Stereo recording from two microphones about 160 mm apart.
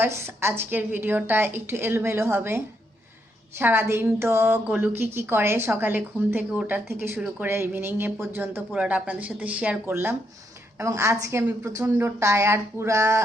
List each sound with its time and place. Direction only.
0.0 s speech: 15° right (ahead or behind)